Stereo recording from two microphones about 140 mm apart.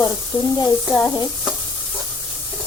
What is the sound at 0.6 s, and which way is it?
Sizzle, 25° left (ahead or behind).